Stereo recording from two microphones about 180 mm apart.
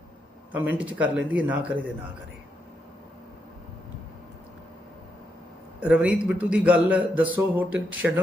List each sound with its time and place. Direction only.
0.5 s a man's voice: 10° right (ahead or behind)
5.8 s a man's voice: 5° right (ahead or behind)